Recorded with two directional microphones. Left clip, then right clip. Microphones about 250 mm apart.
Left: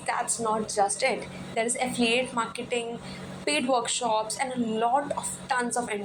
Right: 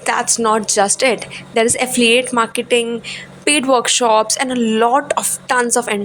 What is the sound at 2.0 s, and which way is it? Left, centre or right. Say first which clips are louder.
Speech: right 13 dB; right.